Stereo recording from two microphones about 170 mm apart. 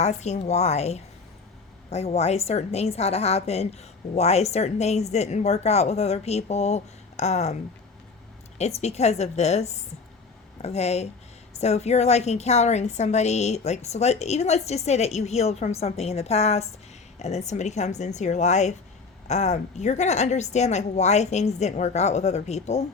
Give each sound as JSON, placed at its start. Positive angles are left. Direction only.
{"t": 0.0, "sound": "a woman's voice", "side_deg": 40}
{"t": 8.5, "sound": "a woman's voice", "side_deg": 40}